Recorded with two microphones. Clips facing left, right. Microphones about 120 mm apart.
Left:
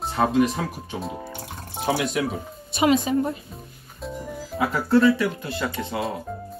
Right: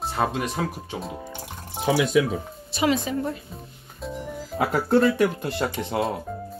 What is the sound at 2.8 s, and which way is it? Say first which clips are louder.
Speech: left 3 dB; 20° left (ahead or behind).